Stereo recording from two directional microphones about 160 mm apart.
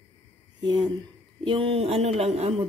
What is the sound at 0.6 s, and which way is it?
Speech, 25° right (ahead or behind).